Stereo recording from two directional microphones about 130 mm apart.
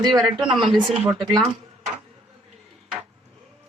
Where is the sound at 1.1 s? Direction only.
35° right (ahead or behind).